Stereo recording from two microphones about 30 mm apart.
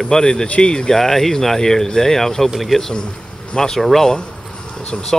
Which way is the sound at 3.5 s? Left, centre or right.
Left.